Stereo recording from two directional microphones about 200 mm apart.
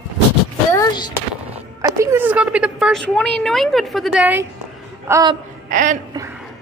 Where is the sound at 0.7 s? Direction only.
20° left (ahead or behind).